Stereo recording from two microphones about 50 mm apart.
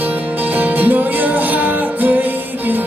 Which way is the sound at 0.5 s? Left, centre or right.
Right.